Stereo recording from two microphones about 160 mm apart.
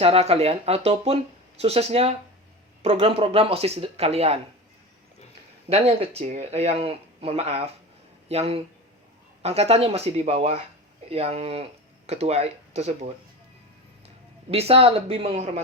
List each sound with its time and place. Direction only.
0.0 s speech: 40° right (ahead or behind)
5.6 s speech: 40° right (ahead or behind)
14.5 s speech: 40° right (ahead or behind)